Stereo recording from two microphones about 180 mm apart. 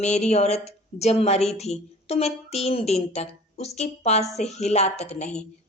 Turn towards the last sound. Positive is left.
turn(degrees=35)  # may be behind; listen again after turning